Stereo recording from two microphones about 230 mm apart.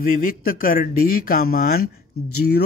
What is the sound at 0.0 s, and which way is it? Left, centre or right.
Speech, left.